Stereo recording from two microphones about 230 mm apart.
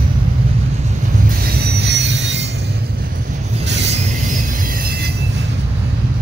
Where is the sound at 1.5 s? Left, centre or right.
Right.